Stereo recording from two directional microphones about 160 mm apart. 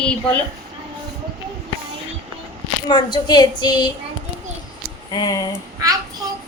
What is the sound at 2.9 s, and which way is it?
A woman's voice, 25° left (ahead or behind).